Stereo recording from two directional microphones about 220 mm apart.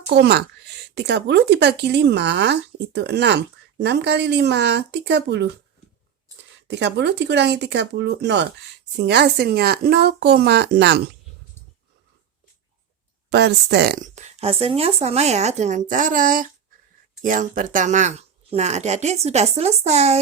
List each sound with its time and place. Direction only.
0.1 s speech: 50° right (ahead or behind)
6.7 s speech: 50° right (ahead or behind)
13.3 s speech: 50° right (ahead or behind)
14.0 s speech: 30° right (ahead or behind)